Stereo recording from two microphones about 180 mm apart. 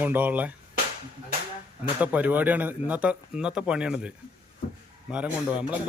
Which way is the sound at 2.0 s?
10° right (ahead or behind).